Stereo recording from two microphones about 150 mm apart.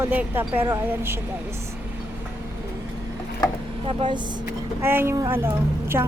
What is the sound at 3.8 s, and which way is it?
Speech, 35° right (ahead or behind).